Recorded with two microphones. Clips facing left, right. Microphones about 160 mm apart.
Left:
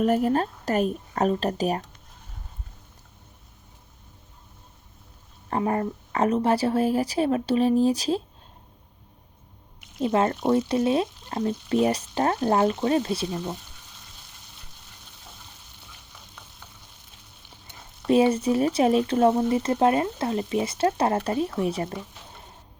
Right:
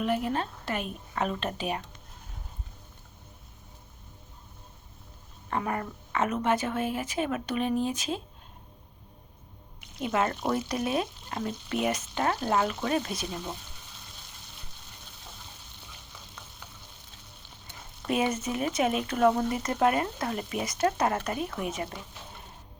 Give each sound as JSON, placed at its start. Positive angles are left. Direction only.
{"t": 0.0, "sound": "speech", "side_deg": 40}
{"t": 5.5, "sound": "speech", "side_deg": 30}
{"t": 10.0, "sound": "speech", "side_deg": 30}
{"t": 18.1, "sound": "speech", "side_deg": 30}